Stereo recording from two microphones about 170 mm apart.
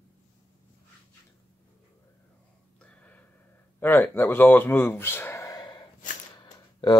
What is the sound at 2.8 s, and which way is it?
Gasp, 5° left (ahead or behind).